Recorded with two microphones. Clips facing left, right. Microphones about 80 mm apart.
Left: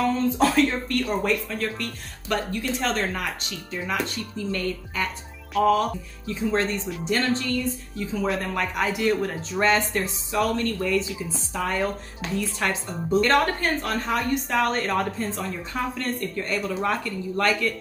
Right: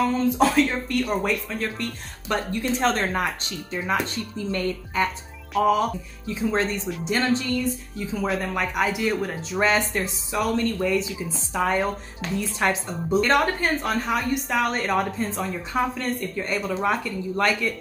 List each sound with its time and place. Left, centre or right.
0.0 s a woman's voice: centre
1.6 s speech: right
2.8 s speech: right
5.7 s a woman's voice: centre
8.1 s a woman's voice: centre